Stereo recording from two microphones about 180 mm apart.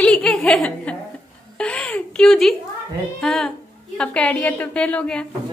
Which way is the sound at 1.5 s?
5° left (ahead or behind).